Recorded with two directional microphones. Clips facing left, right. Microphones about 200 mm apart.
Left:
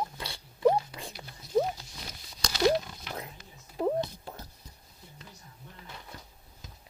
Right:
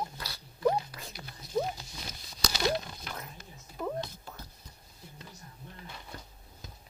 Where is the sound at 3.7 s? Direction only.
30° left (ahead or behind).